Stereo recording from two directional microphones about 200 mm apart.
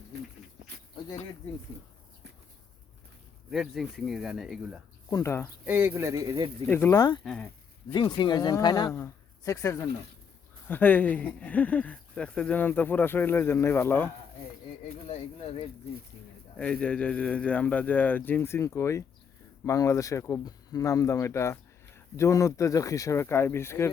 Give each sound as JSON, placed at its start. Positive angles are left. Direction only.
{"t": 3.5, "sound": "speech", "side_deg": 0}
{"t": 5.1, "sound": "speech", "side_deg": 15}
{"t": 5.6, "sound": "speech", "side_deg": -10}
{"t": 6.7, "sound": "speech", "side_deg": 10}
{"t": 7.3, "sound": "speech", "side_deg": 5}
{"t": 7.9, "sound": "speech", "side_deg": 20}
{"t": 15.0, "sound": "speech", "side_deg": 30}
{"t": 16.6, "sound": "speech", "side_deg": 5}